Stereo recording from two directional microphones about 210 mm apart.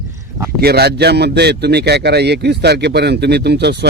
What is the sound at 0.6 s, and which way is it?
A man's voice, 50° right (ahead or behind).